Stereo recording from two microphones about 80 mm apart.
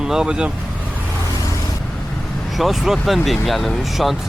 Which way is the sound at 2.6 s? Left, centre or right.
Centre.